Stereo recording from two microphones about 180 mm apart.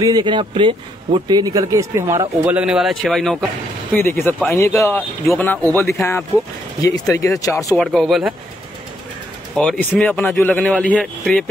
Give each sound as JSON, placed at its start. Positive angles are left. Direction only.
{"t": 0.0, "sound": "speech", "side_deg": -25}
{"t": 3.9, "sound": "speech", "side_deg": 10}
{"t": 5.2, "sound": "speech", "side_deg": 0}
{"t": 5.5, "sound": "speech", "side_deg": 10}
{"t": 7.7, "sound": "speech", "side_deg": 0}
{"t": 9.6, "sound": "speech", "side_deg": 5}